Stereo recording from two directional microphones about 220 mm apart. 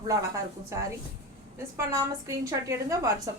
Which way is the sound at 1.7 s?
15° right (ahead or behind).